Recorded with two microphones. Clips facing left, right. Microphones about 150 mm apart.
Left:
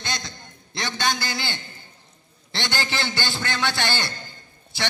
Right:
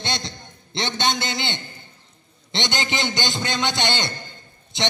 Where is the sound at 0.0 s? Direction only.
30° right (ahead or behind).